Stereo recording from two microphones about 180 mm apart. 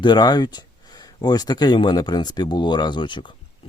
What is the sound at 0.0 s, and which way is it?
Speech, 25° left (ahead or behind).